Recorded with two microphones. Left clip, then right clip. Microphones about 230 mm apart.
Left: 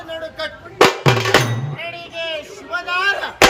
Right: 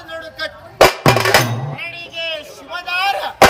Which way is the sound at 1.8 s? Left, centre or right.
Centre.